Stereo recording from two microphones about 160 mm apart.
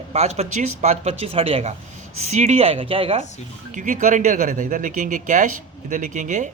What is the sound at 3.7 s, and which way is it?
A man's voice, 50° right (ahead or behind).